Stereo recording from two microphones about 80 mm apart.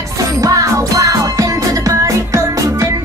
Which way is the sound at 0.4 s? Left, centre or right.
Right.